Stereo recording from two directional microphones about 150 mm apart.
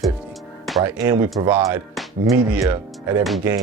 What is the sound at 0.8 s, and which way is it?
Speech, 15° right (ahead or behind).